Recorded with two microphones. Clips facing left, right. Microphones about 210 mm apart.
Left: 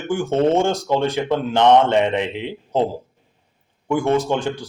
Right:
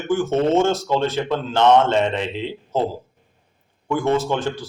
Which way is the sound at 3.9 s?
15° left (ahead or behind).